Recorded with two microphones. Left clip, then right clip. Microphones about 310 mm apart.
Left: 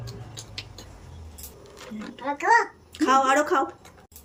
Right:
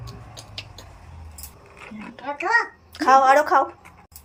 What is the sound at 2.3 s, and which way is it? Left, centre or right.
A child's voice, centre.